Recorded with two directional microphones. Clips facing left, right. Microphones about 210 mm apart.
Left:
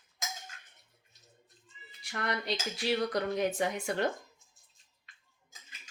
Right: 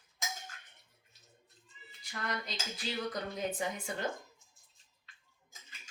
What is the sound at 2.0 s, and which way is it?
Speech, 70° left (ahead or behind).